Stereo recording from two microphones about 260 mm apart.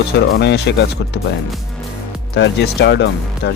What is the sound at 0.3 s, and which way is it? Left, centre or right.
Speech, left.